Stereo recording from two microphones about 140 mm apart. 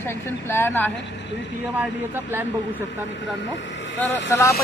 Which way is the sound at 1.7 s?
15° right (ahead or behind).